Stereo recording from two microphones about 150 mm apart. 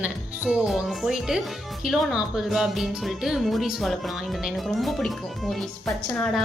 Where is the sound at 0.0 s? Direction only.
10° right (ahead or behind).